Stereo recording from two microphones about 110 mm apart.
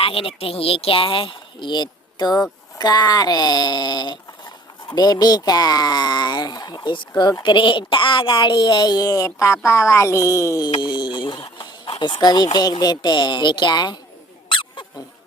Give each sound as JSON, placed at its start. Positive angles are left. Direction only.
{"t": 0.0, "sound": "speech", "side_deg": 60}
{"t": 10.8, "sound": "speech", "side_deg": 45}
{"t": 14.5, "sound": "a sound", "side_deg": 50}